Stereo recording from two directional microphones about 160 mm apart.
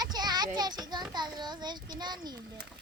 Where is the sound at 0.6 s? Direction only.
25° right (ahead or behind).